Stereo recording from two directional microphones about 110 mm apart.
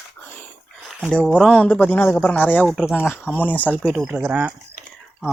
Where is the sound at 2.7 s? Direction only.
Centre (ahead or behind).